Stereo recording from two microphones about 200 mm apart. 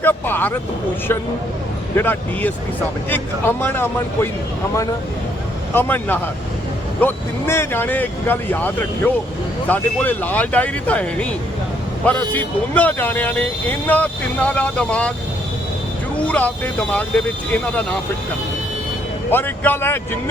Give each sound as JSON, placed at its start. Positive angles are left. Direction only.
{"t": 0.0, "sound": "speech", "side_deg": 10}
{"t": 2.0, "sound": "speech", "side_deg": 10}
{"t": 5.7, "sound": "speech", "side_deg": 10}
{"t": 16.2, "sound": "speech", "side_deg": 5}
{"t": 19.3, "sound": "speech", "side_deg": 10}